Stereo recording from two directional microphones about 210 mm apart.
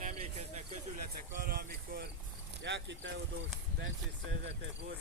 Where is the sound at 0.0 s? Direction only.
30° right (ahead or behind).